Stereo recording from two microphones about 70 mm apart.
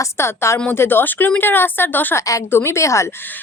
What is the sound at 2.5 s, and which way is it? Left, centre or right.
Speech, left.